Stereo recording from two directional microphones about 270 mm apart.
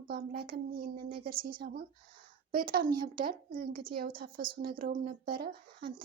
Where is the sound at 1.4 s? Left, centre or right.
Right.